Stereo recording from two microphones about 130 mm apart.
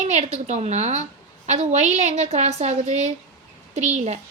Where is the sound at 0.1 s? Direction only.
60° right (ahead or behind).